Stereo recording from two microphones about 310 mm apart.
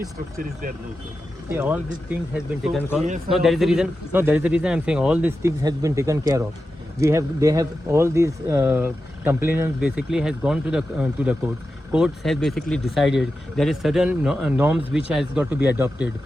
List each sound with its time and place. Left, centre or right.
1.5 s speech: centre